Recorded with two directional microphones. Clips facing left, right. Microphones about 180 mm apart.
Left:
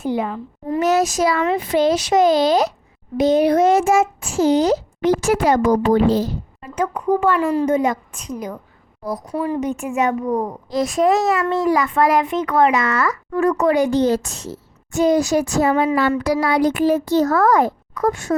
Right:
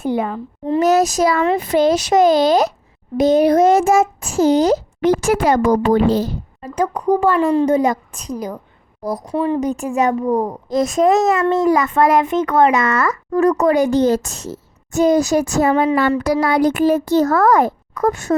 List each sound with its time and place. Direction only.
0.0 s a child's voice: 55° right (ahead or behind)
0.8 s a woman's voice: 40° right (ahead or behind); by 6.3 s 60° right (ahead or behind)
6.6 s a woman's voice: 40° right (ahead or behind)
9.2 s speech: 25° right (ahead or behind)
9.6 s a woman's voice: 35° right (ahead or behind)